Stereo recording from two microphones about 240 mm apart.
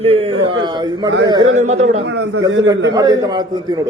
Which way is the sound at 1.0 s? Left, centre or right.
Right.